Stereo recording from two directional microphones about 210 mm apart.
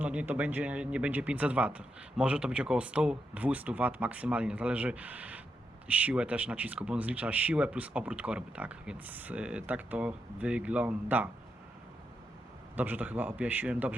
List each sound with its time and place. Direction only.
0.0 s speech: 5° right (ahead or behind)
12.7 s speech: 10° right (ahead or behind)